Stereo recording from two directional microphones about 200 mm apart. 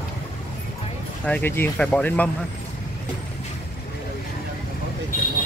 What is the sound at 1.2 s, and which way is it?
Speech, 10° left (ahead or behind).